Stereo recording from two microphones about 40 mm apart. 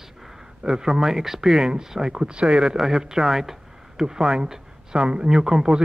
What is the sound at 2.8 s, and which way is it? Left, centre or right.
A man's voice, centre.